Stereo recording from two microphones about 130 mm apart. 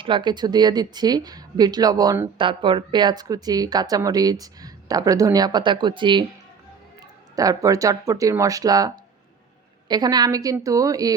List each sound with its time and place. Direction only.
0.0 s speech: 40° right (ahead or behind)
2.4 s speech: 40° right (ahead or behind)
7.3 s speech: 25° right (ahead or behind)
9.9 s speech: 30° right (ahead or behind)